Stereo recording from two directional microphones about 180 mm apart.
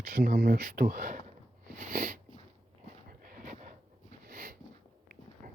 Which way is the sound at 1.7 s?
50° right (ahead or behind).